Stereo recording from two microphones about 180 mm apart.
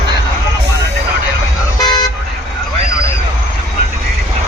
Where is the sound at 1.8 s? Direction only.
25° left (ahead or behind).